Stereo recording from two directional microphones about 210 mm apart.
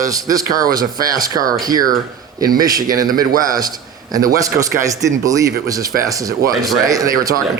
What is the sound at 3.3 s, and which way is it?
Speech, 40° right (ahead or behind).